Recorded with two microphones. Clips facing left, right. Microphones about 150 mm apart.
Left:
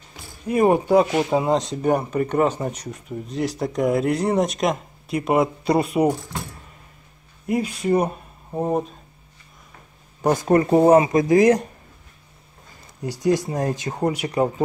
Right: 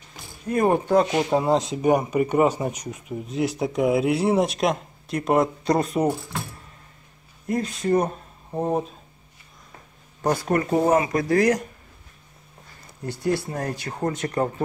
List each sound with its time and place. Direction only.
0.5 s speech: 10° left (ahead or behind)
7.4 s speech: 10° left (ahead or behind)
10.2 s speech: 15° left (ahead or behind)
13.0 s speech: 15° left (ahead or behind)